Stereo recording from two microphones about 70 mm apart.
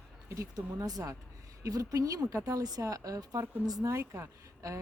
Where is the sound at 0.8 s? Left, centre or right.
Right.